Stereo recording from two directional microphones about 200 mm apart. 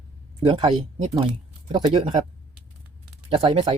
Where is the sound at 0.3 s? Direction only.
30° right (ahead or behind).